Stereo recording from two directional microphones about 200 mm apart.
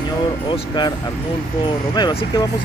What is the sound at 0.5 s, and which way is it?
Speech, 25° left (ahead or behind).